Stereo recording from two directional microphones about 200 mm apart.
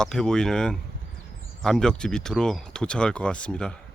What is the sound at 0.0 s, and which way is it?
Speech, 5° left (ahead or behind).